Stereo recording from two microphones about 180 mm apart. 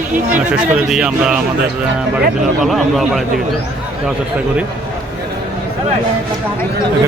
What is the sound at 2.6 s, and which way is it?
Speech, centre (ahead or behind).